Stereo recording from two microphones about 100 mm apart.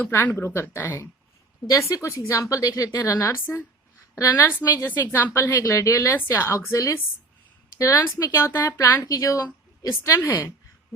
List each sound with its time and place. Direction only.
0.0 s a woman's voice: 15° left (ahead or behind)
1.6 s a woman's voice: 35° left (ahead or behind)
3.4 s a woman's voice: 25° left (ahead or behind)
8.2 s a woman's voice: 30° left (ahead or behind)
9.0 s a woman's voice: 35° left (ahead or behind)